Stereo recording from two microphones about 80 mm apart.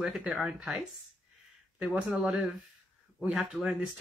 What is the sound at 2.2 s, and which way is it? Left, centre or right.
Speech, centre.